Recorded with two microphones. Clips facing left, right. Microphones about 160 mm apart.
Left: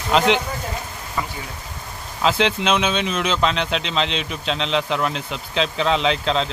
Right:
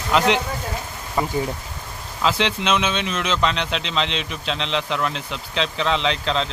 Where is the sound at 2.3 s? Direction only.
Centre (ahead or behind).